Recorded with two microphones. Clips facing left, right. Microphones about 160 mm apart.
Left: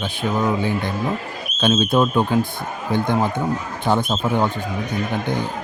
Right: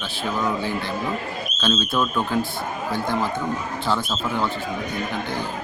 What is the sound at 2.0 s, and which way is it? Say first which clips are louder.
Speech: left 5 dB; 30° left (ahead or behind).